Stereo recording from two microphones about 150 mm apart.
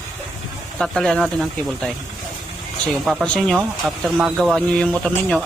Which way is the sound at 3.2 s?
5° left (ahead or behind).